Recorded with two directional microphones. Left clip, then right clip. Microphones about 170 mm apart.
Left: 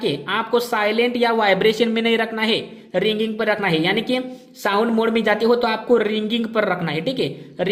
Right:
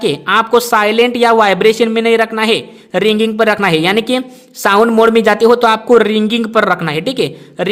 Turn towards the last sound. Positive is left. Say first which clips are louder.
# right 7 dB
turn(degrees=-40)  # may be behind; listen again after turning